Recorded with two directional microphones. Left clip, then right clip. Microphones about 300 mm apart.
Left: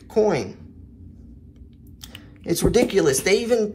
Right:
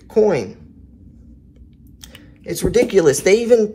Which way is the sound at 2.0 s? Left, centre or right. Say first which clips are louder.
Even; centre.